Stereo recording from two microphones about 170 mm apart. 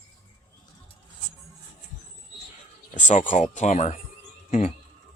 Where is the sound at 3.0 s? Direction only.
45° left (ahead or behind).